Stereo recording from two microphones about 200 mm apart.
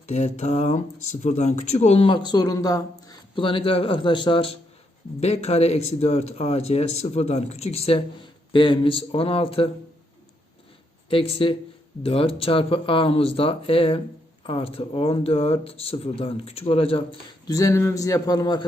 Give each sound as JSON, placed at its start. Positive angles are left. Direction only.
{"t": 0.1, "sound": "a man's voice", "side_deg": 35}
{"t": 11.1, "sound": "speech", "side_deg": 25}